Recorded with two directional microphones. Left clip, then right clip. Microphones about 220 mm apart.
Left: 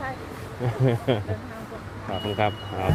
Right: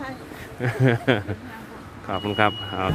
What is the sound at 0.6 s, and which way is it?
Speech, 25° right (ahead or behind).